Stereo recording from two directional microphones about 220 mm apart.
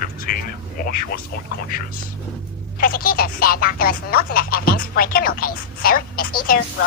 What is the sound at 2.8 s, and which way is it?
Speech, 40° left (ahead or behind).